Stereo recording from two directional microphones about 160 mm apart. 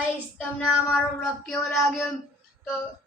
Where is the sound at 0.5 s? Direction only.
Centre (ahead or behind).